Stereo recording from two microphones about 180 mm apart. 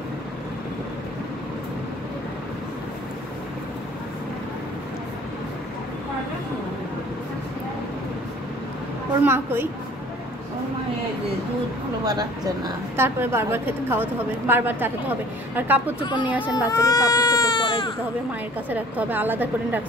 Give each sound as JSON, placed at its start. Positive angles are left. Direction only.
{"t": 9.2, "sound": "a woman's voice", "side_deg": -10}
{"t": 12.0, "sound": "a woman's voice", "side_deg": -20}
{"t": 16.4, "sound": "speech", "side_deg": 20}
{"t": 18.7, "sound": "a woman's voice", "side_deg": -10}